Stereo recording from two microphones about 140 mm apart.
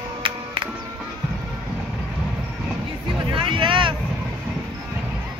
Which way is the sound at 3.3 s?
35° right (ahead or behind).